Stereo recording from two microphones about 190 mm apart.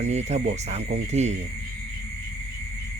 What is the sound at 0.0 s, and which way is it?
Speech, 35° right (ahead or behind).